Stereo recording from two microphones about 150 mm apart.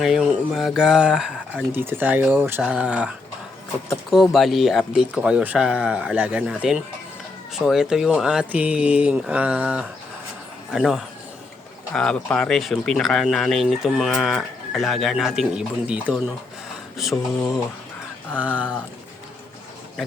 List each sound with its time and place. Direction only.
0.0 s speech: centre (ahead or behind)